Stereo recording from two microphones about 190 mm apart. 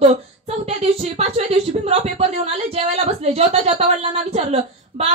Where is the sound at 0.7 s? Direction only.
30° right (ahead or behind).